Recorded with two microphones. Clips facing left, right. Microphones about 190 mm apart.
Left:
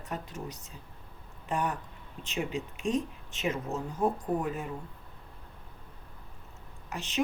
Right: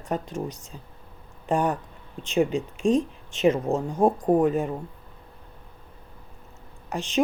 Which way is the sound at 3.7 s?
90° right.